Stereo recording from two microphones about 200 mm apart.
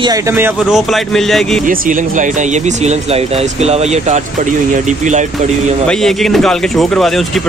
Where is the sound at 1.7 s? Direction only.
40° right (ahead or behind).